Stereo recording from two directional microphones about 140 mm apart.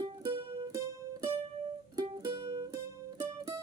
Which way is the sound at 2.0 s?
30° right (ahead or behind).